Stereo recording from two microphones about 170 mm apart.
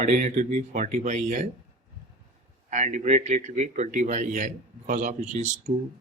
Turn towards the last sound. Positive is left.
turn(degrees=-45)  # may be behind; listen again after turning